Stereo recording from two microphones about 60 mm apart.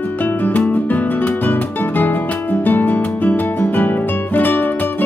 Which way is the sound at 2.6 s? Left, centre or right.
Left.